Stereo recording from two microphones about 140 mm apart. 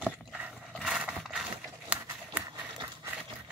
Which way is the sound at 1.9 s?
15° right (ahead or behind).